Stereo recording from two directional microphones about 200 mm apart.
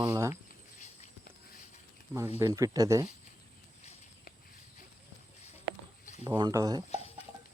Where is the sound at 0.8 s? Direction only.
45° left (ahead or behind).